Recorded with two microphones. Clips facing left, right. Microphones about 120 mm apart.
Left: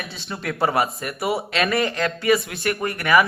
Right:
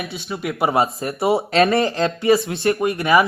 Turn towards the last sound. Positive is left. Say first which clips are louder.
# right 3 dB
turn(degrees=-25)  # may be behind; listen again after turning